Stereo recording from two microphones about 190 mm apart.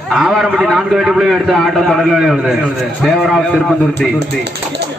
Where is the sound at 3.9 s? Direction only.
60° right (ahead or behind).